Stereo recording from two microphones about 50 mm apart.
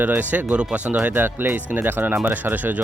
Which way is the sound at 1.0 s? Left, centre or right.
Right.